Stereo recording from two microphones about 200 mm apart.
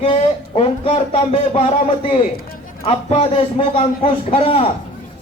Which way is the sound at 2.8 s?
30° left (ahead or behind).